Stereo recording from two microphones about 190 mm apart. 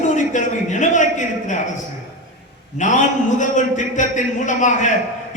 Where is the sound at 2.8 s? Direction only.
40° left (ahead or behind).